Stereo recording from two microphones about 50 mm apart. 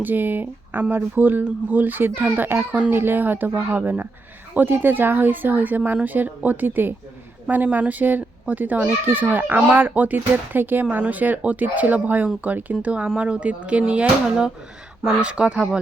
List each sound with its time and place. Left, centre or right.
0.0 s speech: right
10.8 s speech: right
12.8 s speech: right